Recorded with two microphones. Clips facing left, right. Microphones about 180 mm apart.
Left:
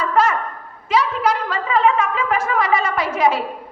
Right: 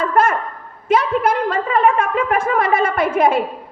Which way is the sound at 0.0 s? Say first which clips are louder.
Right 2 dB; 50° right (ahead or behind).